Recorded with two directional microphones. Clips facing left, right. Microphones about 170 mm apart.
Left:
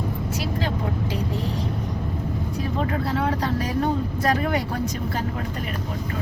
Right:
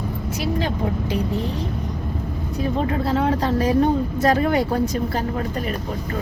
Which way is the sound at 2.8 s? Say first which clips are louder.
Right 3 dB; 25° right (ahead or behind).